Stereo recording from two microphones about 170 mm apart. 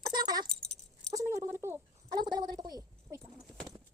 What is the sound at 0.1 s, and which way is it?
Keys jangling, 25° right (ahead or behind).